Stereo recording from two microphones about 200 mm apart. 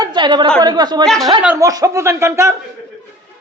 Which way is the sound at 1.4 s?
10° right (ahead or behind).